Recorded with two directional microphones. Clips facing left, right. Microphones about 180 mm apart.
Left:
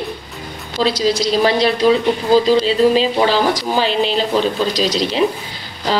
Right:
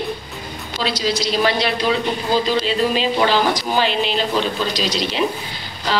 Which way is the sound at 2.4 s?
35° left (ahead or behind).